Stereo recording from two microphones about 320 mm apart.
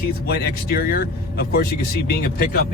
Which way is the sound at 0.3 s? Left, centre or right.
Left.